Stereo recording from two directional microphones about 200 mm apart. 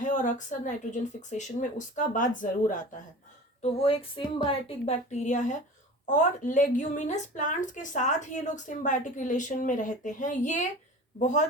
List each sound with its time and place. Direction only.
0.0 s a woman's voice: 40° left (ahead or behind)
3.6 s a sound: 30° left (ahead or behind)
4.4 s a woman's voice: 35° left (ahead or behind)